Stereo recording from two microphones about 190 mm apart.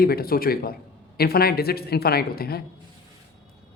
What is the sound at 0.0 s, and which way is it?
A man's voice, 55° left (ahead or behind).